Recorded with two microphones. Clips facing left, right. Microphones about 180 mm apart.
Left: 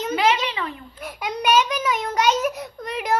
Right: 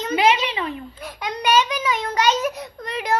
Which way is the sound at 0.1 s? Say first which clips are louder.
Right 3 dB; 20° right (ahead or behind).